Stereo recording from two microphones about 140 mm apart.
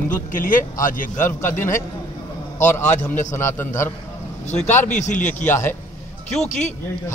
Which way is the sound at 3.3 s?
20° left (ahead or behind).